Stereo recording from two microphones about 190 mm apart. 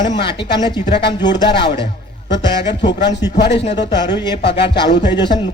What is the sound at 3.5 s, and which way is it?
A man's voice, 30° left (ahead or behind).